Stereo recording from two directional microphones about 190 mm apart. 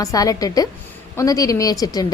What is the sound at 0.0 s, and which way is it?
A woman's voice, 20° left (ahead or behind).